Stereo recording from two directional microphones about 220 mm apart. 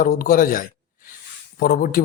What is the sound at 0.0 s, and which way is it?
Speech, 40° left (ahead or behind).